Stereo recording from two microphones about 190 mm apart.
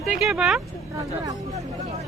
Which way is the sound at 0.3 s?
5° right (ahead or behind).